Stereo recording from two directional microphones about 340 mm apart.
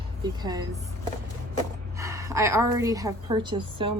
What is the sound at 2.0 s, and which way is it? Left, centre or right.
A woman's voice, centre.